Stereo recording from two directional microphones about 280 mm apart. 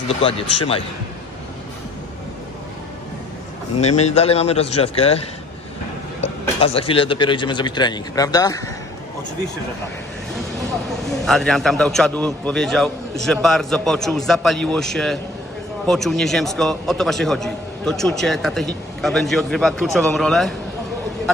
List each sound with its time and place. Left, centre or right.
3.8 s speech: left
6.2 s speech: left
11.2 s a man's voice: centre